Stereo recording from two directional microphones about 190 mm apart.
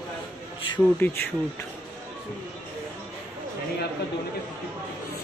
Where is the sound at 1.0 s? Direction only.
10° left (ahead or behind).